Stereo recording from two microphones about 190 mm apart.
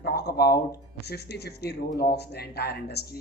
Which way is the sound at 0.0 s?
60° left (ahead or behind).